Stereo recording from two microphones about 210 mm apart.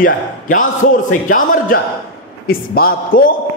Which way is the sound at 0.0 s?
40° left (ahead or behind).